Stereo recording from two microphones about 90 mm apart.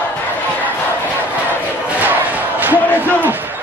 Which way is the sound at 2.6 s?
20° right (ahead or behind).